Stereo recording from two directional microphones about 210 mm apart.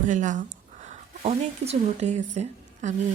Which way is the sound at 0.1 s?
35° right (ahead or behind).